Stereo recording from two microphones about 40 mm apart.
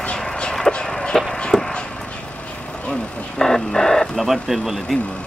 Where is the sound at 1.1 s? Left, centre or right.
Centre.